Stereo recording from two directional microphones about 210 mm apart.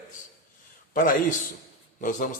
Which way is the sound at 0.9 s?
40° left (ahead or behind).